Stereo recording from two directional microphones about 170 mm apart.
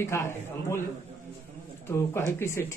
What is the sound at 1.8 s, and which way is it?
Speech, 15° left (ahead or behind).